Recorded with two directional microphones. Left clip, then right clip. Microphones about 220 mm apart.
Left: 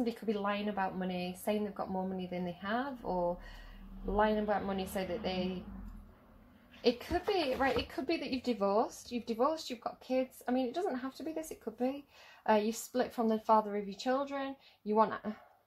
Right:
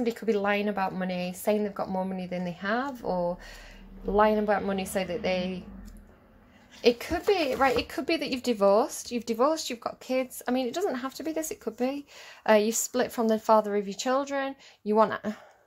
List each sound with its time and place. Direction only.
0.0 s speech: 45° right (ahead or behind)
6.8 s speech: 40° right (ahead or behind)